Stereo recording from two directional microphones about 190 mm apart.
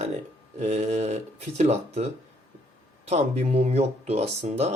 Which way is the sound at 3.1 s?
35° right (ahead or behind).